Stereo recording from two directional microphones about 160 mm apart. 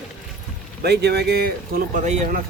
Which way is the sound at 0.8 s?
90° right.